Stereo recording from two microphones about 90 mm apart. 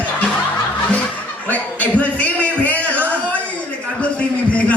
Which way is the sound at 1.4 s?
15° left (ahead or behind).